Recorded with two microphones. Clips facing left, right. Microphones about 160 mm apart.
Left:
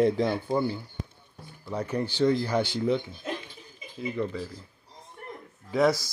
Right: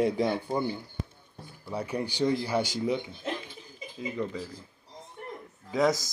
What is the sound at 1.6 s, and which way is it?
Speech, 10° right (ahead or behind).